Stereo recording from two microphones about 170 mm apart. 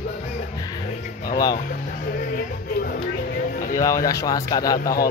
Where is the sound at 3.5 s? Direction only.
55° left (ahead or behind).